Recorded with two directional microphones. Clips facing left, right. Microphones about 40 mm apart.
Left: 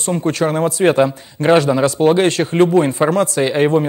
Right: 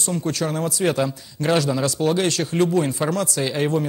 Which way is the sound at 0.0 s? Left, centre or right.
Left.